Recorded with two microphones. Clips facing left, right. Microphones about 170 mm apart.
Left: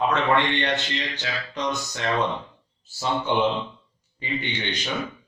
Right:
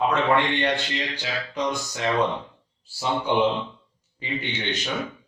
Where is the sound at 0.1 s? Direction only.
5° right (ahead or behind).